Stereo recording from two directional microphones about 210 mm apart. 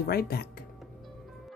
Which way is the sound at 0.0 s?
45° left (ahead or behind).